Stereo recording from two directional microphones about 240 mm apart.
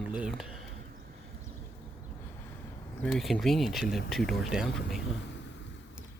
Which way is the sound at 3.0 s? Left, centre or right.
Centre.